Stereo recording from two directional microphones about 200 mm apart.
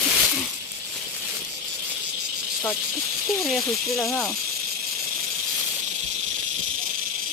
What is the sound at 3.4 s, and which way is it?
Speech, centre (ahead or behind).